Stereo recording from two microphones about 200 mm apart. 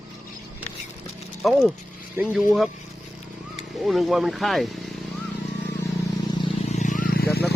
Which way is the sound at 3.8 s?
Centre (ahead or behind).